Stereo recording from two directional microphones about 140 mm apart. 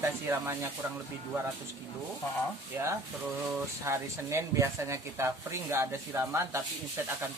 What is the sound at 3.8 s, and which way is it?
Speech, 20° right (ahead or behind).